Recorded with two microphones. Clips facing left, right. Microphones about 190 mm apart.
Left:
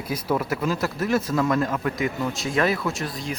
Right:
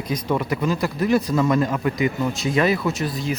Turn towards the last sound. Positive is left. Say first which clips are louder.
# right 5 dB
turn(degrees=0)  # may be behind; listen again after turning